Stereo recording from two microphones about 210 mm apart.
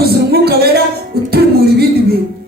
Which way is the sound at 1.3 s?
50° right (ahead or behind).